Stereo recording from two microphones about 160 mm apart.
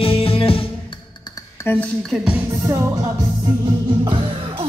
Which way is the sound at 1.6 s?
15° left (ahead or behind).